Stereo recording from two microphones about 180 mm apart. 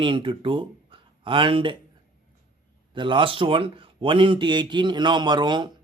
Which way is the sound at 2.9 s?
25° right (ahead or behind).